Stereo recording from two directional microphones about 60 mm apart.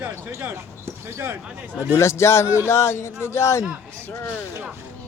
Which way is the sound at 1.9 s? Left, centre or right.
Left.